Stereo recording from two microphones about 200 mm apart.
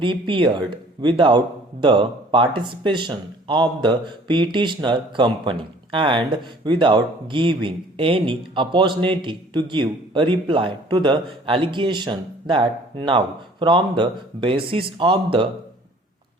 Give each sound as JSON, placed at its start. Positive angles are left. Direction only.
{"t": 0.0, "sound": "speech", "side_deg": -25}